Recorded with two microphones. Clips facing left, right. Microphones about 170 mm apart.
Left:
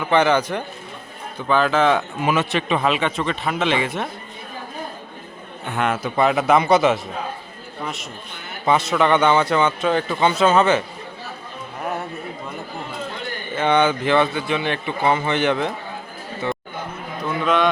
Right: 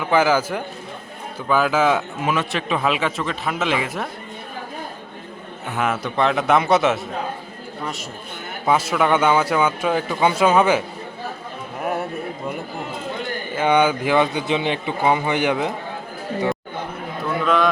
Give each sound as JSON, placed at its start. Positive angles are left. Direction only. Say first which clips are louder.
{"t": 0.0, "sound": "a man's voice", "louder": "even", "side_deg": -5}
{"t": 5.6, "sound": "a man's voice", "louder": "left 1 dB", "side_deg": -5}
{"t": 8.6, "sound": "a man's voice", "louder": "left 1 dB", "side_deg": -5}
{"t": 13.6, "sound": "a man's voice", "louder": "even", "side_deg": -10}
{"t": 17.2, "sound": "a sound", "louder": "even", "side_deg": 0}